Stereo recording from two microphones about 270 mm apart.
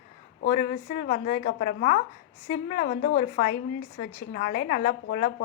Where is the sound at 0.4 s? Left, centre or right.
Left.